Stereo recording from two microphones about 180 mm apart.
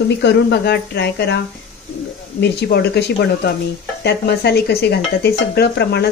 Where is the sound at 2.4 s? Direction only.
70° left (ahead or behind).